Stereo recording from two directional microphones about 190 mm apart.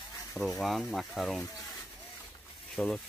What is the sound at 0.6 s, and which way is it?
Speech, centre (ahead or behind).